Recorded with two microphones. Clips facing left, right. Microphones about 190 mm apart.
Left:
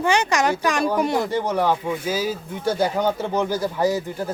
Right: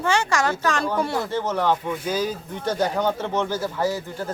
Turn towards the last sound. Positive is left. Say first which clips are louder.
# left 3 dB
turn(degrees=15)  # may be behind; listen again after turning